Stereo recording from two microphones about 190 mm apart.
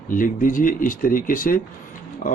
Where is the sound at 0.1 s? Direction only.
45° left (ahead or behind).